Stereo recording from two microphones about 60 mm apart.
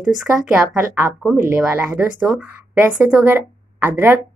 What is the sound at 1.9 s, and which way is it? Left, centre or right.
Speech, right.